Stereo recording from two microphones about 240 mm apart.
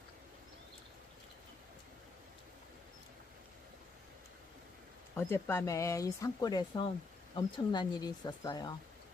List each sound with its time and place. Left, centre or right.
5.1 s speech: centre